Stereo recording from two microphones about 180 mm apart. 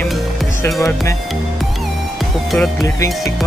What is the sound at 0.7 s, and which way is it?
Music, 15° left (ahead or behind).